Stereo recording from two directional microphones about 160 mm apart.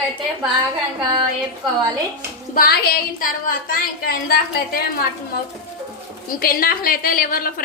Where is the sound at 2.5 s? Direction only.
70° left (ahead or behind).